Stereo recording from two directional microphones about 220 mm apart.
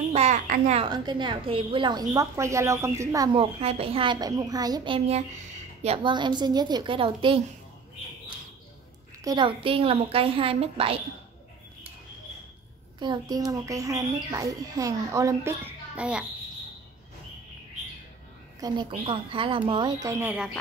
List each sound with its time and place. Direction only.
0.1 s a child's voice: 30° right (ahead or behind)
0.8 s a woman's voice: 20° right (ahead or behind)
3.3 s a woman's voice: 25° right (ahead or behind)
9.2 s a woman's voice: 20° right (ahead or behind)
13.0 s speech: 20° right (ahead or behind)
18.6 s a woman's voice: 20° right (ahead or behind); by 20.5 s 5° right (ahead or behind)